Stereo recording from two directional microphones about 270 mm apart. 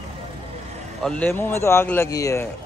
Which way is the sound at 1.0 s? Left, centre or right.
Centre.